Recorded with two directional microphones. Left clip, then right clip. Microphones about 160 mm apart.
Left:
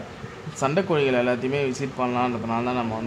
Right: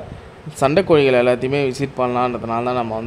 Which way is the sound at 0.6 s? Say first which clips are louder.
Right 8 dB; 40° right (ahead or behind).